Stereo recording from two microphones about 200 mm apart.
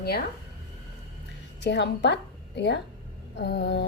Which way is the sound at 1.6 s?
60° left (ahead or behind).